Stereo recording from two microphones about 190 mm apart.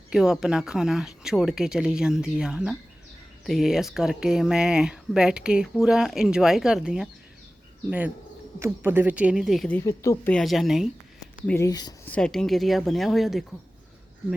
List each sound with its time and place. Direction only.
0.1 s speech: centre (ahead or behind); by 10.3 s 15° left (ahead or behind)
10.3 s speech: centre (ahead or behind)
11.4 s speech: 15° left (ahead or behind)
12.0 s speech: 5° left (ahead or behind)